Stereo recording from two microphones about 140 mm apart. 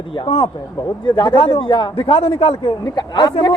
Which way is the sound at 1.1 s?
35° left (ahead or behind).